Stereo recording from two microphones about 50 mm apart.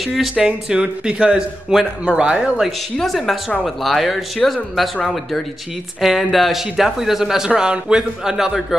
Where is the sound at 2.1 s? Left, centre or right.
Right.